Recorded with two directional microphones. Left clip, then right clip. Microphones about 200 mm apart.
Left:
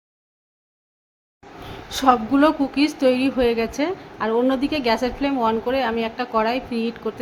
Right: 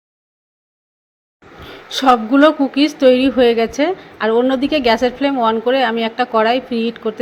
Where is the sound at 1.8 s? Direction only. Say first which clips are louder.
Right 5 dB; 15° right (ahead or behind).